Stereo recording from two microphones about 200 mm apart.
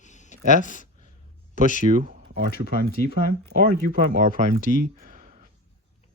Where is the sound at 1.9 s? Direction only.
45° right (ahead or behind).